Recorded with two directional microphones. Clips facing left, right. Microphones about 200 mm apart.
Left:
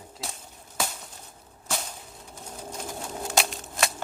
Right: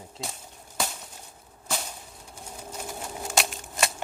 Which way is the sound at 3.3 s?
Centre (ahead or behind).